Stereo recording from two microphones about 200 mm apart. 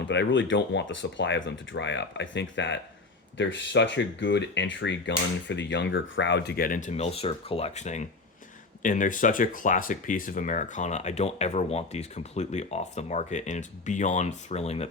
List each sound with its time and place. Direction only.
0.1 s speech: 65° left (ahead or behind); by 14.8 s 35° left (ahead or behind)